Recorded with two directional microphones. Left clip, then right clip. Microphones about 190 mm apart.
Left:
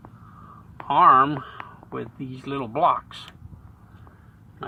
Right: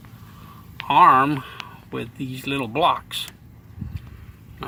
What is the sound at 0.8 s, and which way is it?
Speech, 20° right (ahead or behind).